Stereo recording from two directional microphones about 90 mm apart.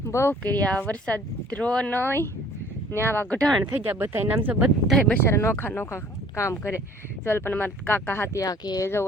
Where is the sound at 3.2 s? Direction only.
5° left (ahead or behind).